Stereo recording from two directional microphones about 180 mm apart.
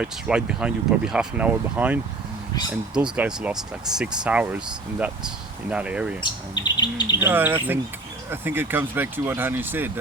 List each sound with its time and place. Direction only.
0.0 s speech: 5° right (ahead or behind)
6.2 s speech: 25° left (ahead or behind)
7.2 s speech: 10° right (ahead or behind)